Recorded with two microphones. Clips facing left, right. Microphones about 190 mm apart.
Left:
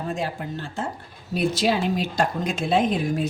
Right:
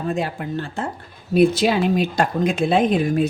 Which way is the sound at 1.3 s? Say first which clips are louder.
Right 6 dB; 60° right (ahead or behind).